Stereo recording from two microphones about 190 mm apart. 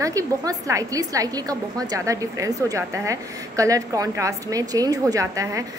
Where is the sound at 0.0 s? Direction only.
15° right (ahead or behind).